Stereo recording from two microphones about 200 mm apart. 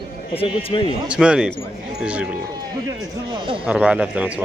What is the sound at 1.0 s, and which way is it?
Speech, 5° right (ahead or behind).